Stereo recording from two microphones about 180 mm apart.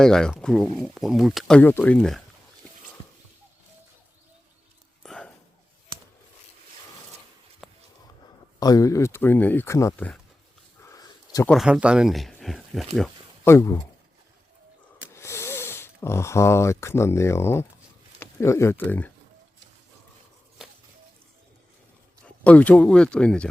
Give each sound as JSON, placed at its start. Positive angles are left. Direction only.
{"t": 0.0, "sound": "speech", "side_deg": 5}
{"t": 5.0, "sound": "whispering", "side_deg": 5}
{"t": 7.6, "sound": "a sound", "side_deg": 0}
{"t": 8.5, "sound": "speech", "side_deg": 20}
{"t": 10.8, "sound": "a sound", "side_deg": 20}
{"t": 11.4, "sound": "speech", "side_deg": 0}
{"t": 13.4, "sound": "speech", "side_deg": 15}
{"t": 15.1, "sound": "speech", "side_deg": 15}
{"t": 22.2, "sound": "speech", "side_deg": 10}